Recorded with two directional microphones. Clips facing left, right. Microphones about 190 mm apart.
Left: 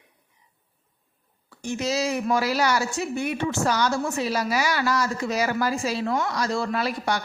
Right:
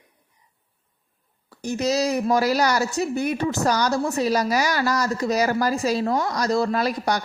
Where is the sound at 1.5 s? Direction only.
40° right (ahead or behind).